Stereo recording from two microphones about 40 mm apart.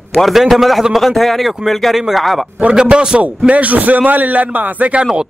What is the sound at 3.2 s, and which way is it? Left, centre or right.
A man's voice, right.